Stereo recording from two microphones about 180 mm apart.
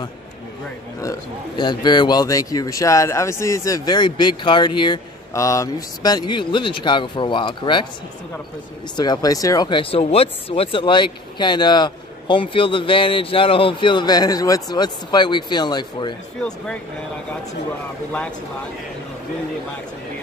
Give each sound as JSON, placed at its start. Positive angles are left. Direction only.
{"t": 1.6, "sound": "speech", "side_deg": 25}
{"t": 8.9, "sound": "speech", "side_deg": 25}
{"t": 16.3, "sound": "speech", "side_deg": 5}